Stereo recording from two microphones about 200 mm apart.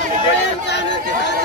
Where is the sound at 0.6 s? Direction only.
60° left (ahead or behind).